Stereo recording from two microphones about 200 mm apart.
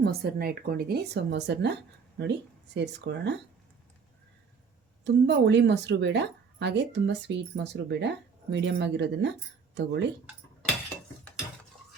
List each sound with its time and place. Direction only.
0.0 s speech: 50° right (ahead or behind)
2.7 s a woman's voice: 60° right (ahead or behind)
5.0 s a woman's voice: 60° right (ahead or behind)